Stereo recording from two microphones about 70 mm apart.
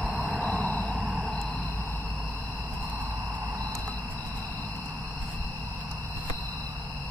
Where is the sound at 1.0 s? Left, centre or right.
Right.